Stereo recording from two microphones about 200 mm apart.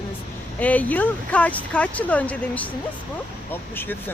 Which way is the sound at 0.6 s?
10° left (ahead or behind).